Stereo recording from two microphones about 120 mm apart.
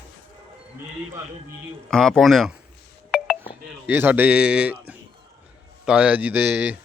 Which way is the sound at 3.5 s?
15° right (ahead or behind).